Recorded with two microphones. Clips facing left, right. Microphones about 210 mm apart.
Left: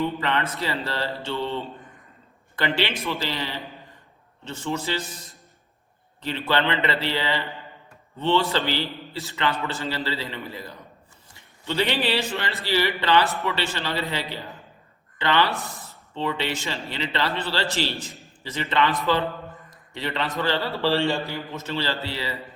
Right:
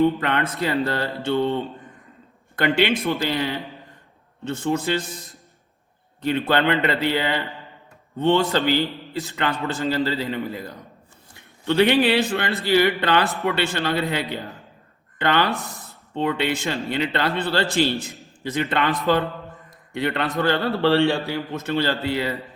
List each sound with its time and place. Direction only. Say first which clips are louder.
0.0 s a man's voice: right 5 dB; 50° right (ahead or behind)
6.2 s a man's voice: right 4 dB; 50° right (ahead or behind)